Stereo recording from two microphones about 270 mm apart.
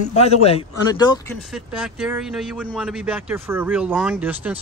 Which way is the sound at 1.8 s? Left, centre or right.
Centre.